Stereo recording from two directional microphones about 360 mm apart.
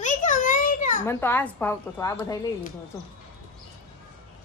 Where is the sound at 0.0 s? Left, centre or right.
Left.